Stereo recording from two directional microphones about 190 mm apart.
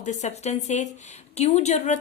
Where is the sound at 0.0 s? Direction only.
40° left (ahead or behind).